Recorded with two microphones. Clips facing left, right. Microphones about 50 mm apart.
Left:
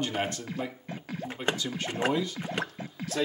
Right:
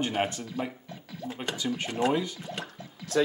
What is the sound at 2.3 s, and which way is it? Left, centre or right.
Speech, left.